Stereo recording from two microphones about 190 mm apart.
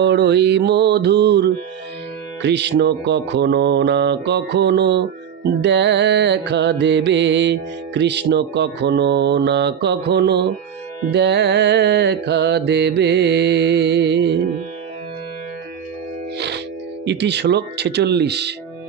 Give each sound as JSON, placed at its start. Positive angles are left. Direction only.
{"t": 0.0, "sound": "music", "side_deg": -65}
{"t": 16.3, "sound": "speech", "side_deg": -65}